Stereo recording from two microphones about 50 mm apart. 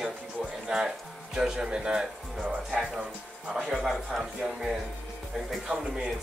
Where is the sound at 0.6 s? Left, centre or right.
Centre.